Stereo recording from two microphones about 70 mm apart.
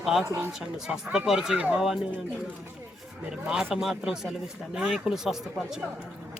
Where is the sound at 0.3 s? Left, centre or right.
Right.